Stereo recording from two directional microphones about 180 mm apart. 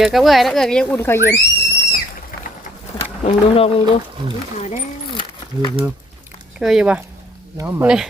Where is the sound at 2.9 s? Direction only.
20° left (ahead or behind).